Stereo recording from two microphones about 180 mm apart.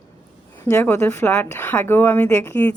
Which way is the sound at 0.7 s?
15° left (ahead or behind).